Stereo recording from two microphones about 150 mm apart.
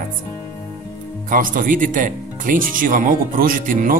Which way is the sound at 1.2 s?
65° right (ahead or behind).